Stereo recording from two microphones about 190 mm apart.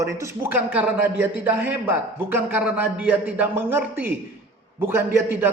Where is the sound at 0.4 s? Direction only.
10° right (ahead or behind).